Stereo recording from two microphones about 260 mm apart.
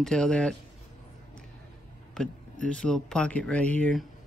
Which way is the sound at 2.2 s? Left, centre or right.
Centre.